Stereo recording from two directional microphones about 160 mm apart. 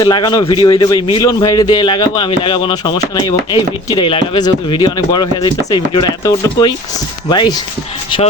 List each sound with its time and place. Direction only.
0.0 s a man's voice: 30° left (ahead or behind)